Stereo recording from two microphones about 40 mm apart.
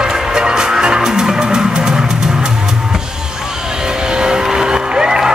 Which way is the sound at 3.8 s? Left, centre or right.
Centre.